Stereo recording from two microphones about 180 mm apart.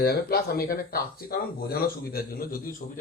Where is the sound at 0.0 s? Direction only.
60° left (ahead or behind).